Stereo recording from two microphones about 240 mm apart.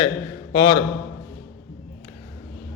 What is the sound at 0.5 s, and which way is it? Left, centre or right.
Speech, centre.